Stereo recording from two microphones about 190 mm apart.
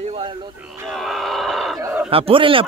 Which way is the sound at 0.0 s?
30° right (ahead or behind).